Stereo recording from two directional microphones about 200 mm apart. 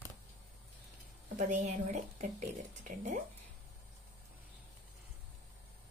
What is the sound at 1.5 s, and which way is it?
Speech, 35° right (ahead or behind).